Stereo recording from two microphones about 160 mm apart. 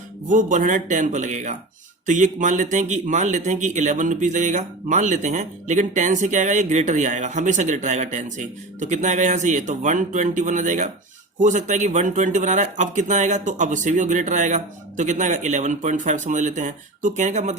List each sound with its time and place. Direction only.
0.3 s speech: 50° right (ahead or behind)